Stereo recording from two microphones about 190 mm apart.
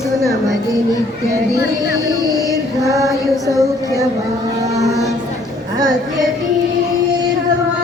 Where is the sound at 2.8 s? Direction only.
15° right (ahead or behind).